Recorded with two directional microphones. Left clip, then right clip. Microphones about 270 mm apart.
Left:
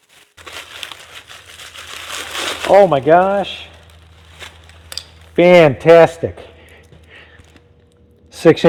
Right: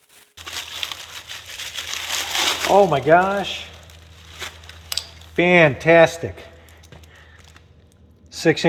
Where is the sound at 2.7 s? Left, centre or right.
Left.